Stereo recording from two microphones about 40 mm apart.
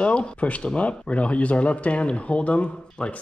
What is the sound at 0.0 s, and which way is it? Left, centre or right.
Speech, left.